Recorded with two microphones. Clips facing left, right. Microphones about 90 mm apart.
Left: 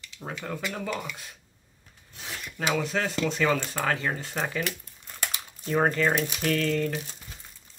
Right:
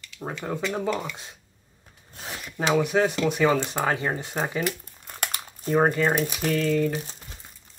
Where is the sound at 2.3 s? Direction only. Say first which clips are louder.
Right 4 dB; 20° right (ahead or behind).